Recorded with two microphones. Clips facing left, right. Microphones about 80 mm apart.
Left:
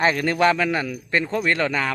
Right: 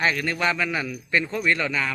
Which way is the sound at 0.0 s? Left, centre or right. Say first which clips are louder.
Left 4 dB; left.